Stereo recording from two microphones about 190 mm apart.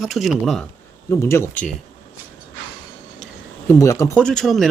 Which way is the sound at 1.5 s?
45° left (ahead or behind).